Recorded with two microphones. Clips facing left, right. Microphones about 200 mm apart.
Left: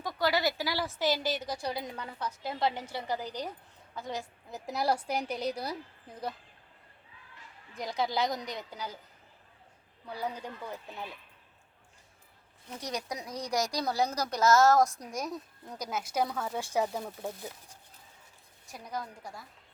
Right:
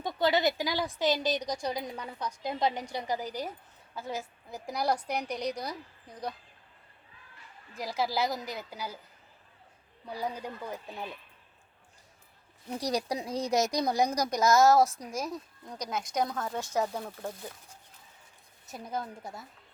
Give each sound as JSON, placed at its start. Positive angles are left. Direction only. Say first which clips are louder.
{"t": 0.0, "sound": "a woman's voice", "louder": "right 3 dB", "side_deg": -25}
{"t": 7.8, "sound": "a woman's voice", "louder": "even", "side_deg": -5}
{"t": 10.1, "sound": "a woman's voice", "louder": "right 1 dB", "side_deg": -10}
{"t": 12.8, "sound": "speech", "louder": "right 6 dB", "side_deg": -35}
{"t": 18.7, "sound": "speech", "louder": "right 3 dB", "side_deg": -25}